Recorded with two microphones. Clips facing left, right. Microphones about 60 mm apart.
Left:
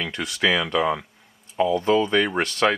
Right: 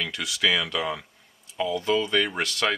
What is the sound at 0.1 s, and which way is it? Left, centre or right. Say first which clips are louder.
Speech: left 4 dB; left.